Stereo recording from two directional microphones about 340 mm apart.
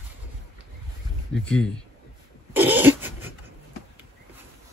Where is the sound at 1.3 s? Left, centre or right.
Centre.